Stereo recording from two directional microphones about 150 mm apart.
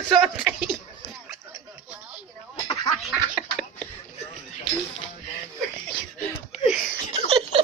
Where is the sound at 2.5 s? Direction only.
40° left (ahead or behind).